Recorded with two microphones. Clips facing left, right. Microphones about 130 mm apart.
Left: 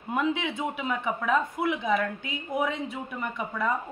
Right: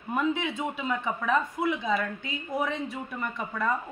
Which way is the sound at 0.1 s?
20° left (ahead or behind).